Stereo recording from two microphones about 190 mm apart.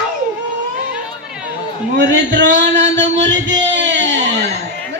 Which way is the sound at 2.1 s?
70° right (ahead or behind).